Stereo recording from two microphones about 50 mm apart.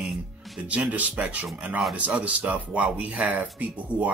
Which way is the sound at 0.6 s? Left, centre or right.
Right.